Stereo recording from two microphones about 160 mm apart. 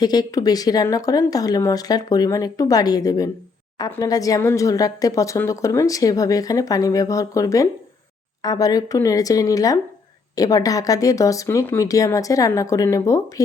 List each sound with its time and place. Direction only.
0.0 s speech: 25° left (ahead or behind)